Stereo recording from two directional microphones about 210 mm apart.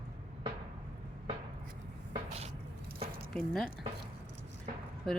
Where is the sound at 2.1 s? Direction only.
30° right (ahead or behind).